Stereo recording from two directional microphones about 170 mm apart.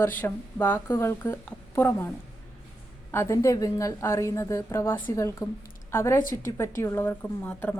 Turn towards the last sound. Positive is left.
turn(degrees=10)  # may be behind; listen again after turning